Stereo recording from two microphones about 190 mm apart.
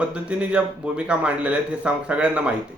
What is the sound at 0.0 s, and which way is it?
A man's voice, 5° right (ahead or behind).